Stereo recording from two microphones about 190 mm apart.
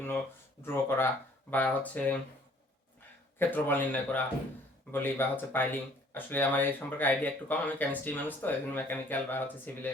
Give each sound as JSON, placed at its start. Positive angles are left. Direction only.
{"t": 0.6, "sound": "speech", "side_deg": 10}
{"t": 3.3, "sound": "speech", "side_deg": 10}